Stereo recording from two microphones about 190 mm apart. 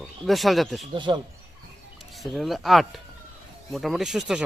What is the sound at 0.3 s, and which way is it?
Speech, centre (ahead or behind).